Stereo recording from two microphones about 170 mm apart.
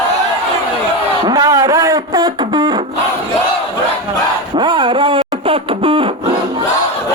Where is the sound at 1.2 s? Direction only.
20° right (ahead or behind).